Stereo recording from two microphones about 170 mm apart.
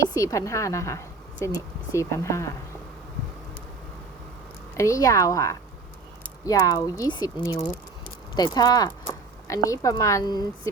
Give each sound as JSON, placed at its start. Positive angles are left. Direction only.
{"t": 0.2, "sound": "speech", "side_deg": 20}
{"t": 4.8, "sound": "speech", "side_deg": 20}
{"t": 8.9, "sound": "a sound", "side_deg": 20}
{"t": 9.8, "sound": "speech", "side_deg": 20}